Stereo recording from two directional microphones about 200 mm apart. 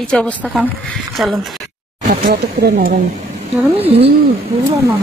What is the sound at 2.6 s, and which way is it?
Speech, 45° right (ahead or behind).